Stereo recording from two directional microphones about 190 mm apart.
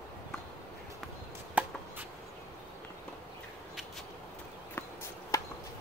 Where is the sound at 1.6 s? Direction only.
10° right (ahead or behind).